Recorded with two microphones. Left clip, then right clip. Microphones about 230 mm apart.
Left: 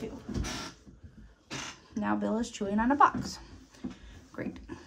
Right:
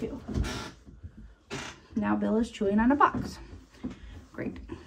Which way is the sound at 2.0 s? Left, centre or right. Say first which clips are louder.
Right 3 dB; centre.